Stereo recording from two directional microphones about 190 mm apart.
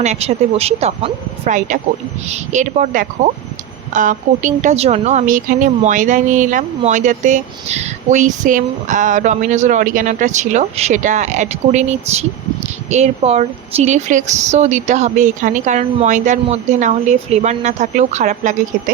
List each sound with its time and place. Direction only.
0.0 s a woman's voice: 35° right (ahead or behind)